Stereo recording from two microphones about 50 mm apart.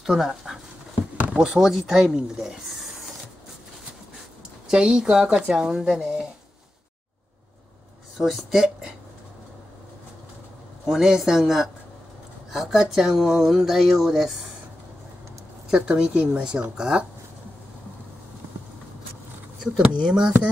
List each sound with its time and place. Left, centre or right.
0.0 s speech: centre
4.6 s speech: centre
8.2 s a sound: centre
10.9 s a woman's voice: centre
12.9 s a sound: centre
15.7 s speech: centre
19.6 s speech: centre